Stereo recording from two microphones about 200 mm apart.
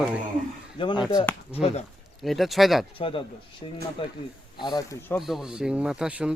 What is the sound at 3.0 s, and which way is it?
A man's voice, 25° left (ahead or behind).